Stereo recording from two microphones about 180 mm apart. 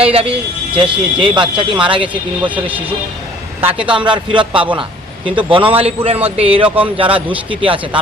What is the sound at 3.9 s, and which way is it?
A man's voice, 25° right (ahead or behind).